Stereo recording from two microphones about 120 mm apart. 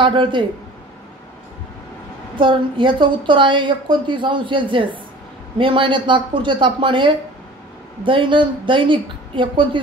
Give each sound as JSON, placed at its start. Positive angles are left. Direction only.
{"t": 0.0, "sound": "a woman's voice", "side_deg": -45}
{"t": 2.3, "sound": "a woman's voice", "side_deg": -45}